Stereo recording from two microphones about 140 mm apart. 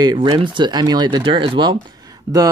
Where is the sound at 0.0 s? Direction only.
30° right (ahead or behind).